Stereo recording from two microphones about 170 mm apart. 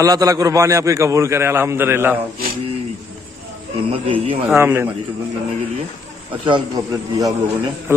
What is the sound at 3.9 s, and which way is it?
Speech, 35° right (ahead or behind).